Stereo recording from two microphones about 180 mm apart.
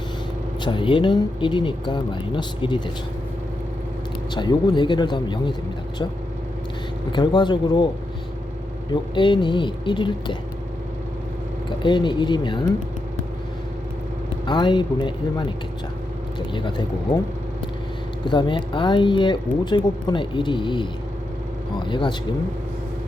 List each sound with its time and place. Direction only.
0.6 s speech: 25° left (ahead or behind)
4.4 s speech: 25° left (ahead or behind)
7.1 s speech: 25° left (ahead or behind)
8.9 s speech: 25° left (ahead or behind)
11.8 s speech: 25° left (ahead or behind)
14.4 s speech: 25° left (ahead or behind)
18.3 s speech: 25° left (ahead or behind)